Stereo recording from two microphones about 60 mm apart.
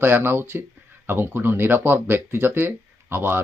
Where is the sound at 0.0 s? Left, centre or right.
Right.